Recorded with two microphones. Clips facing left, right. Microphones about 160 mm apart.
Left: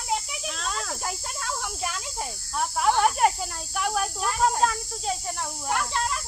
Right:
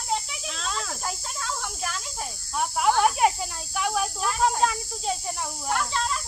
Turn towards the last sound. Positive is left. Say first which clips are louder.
# even
turn(degrees=10)  # may be behind; listen again after turning